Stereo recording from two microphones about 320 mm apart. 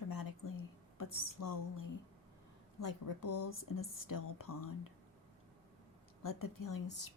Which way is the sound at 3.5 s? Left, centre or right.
Left.